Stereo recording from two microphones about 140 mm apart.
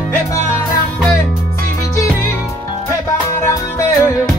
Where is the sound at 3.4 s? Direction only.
20° left (ahead or behind).